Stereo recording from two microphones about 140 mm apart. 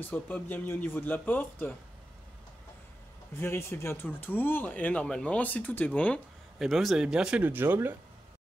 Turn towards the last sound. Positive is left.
turn(degrees=-15)  # may be behind; listen again after turning